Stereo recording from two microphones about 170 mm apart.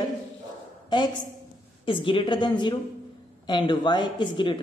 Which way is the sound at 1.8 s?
30° left (ahead or behind).